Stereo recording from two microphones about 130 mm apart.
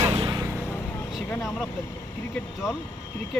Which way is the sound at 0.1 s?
45° right (ahead or behind).